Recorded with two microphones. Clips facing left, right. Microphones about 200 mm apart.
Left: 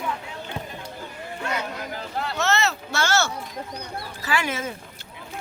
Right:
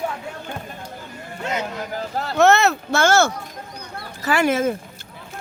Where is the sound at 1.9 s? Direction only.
40° right (ahead or behind).